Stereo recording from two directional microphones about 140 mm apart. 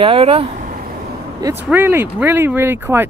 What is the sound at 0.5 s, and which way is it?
Vehicle, 85° right.